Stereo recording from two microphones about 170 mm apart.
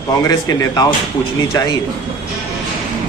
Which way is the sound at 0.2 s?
20° left (ahead or behind).